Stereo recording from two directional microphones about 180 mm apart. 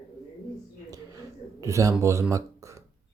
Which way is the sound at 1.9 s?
15° right (ahead or behind).